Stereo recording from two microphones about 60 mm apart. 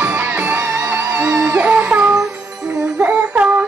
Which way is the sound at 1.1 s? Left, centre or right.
Centre.